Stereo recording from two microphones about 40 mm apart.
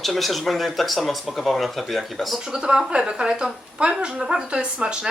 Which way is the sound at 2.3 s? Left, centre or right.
Centre.